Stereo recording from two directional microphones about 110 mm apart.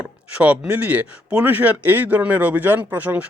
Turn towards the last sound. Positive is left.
turn(degrees=-15)  # may be behind; listen again after turning